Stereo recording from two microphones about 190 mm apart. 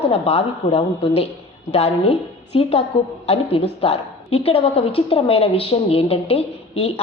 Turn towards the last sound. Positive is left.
turn(degrees=30)  # may be behind; listen again after turning